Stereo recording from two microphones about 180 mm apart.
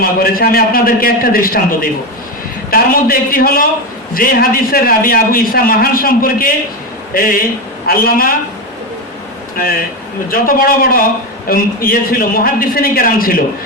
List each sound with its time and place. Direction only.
0.0 s a man's voice: 55° left (ahead or behind)
10.2 s a man's voice: 55° left (ahead or behind)